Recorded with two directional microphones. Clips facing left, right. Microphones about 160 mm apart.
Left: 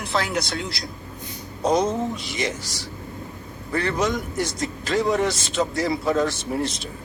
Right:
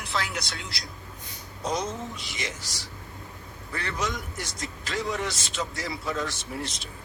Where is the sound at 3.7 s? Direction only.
45° left (ahead or behind).